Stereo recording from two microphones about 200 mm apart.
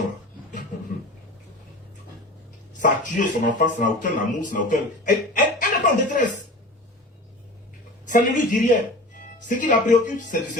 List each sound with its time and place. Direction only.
2.8 s speech: 40° left (ahead or behind)
8.0 s speech: 40° left (ahead or behind)